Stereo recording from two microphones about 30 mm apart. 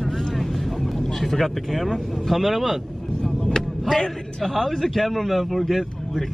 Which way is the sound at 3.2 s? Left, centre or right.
Left.